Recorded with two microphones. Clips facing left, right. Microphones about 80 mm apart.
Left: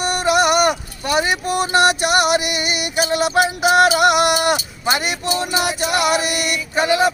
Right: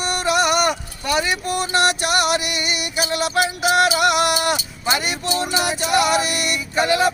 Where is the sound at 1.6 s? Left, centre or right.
Left.